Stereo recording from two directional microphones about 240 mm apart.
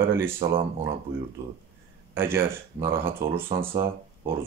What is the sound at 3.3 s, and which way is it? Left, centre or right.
Speech, right.